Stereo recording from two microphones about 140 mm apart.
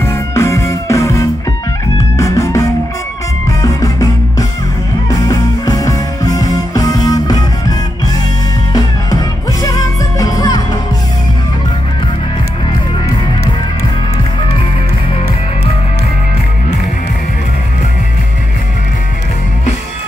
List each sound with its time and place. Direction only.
0.0 s music: 20° left (ahead or behind)
3.6 s music: 25° left (ahead or behind)
8.7 s music: 25° left (ahead or behind)